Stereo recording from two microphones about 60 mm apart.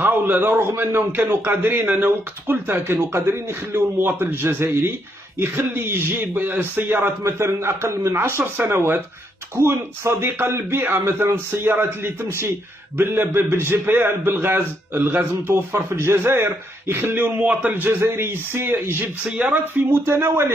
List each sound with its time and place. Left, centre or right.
0.0 s a man's voice: right
2.7 s a man's voice: right
7.2 s a man's voice: right
17.8 s a man's voice: right
19.2 s a man's voice: right
19.6 s a man's voice: right